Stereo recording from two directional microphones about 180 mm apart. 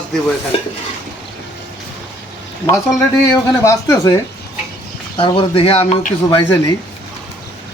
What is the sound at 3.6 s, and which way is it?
Speech, 15° left (ahead or behind).